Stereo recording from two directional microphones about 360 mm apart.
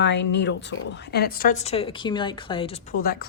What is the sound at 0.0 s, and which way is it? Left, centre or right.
A woman's voice, left.